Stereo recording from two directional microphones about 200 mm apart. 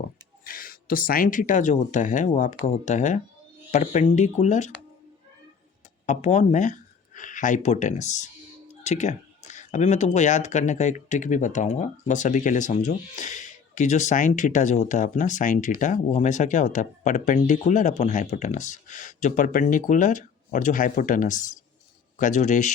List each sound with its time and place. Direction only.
0.4 s speech: 45° left (ahead or behind)
6.1 s speech: 35° left (ahead or behind)